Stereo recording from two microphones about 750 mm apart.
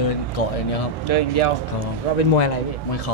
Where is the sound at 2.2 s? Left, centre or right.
Left.